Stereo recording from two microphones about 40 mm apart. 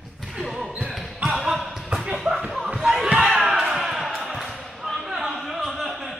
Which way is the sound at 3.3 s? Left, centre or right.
Centre.